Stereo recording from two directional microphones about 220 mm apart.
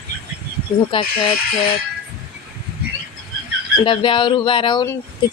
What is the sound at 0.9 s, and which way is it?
Speech, 25° left (ahead or behind).